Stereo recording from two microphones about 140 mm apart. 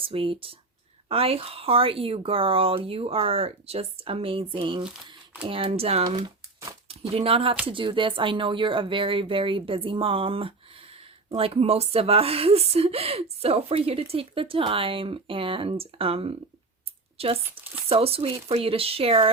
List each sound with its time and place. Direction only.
0.0 s speech: 40° right (ahead or behind)
6.1 s speech: 30° right (ahead or behind)
6.8 s speech: 45° right (ahead or behind)
17.6 s a sound: 10° right (ahead or behind)
17.8 s speech: 45° right (ahead or behind)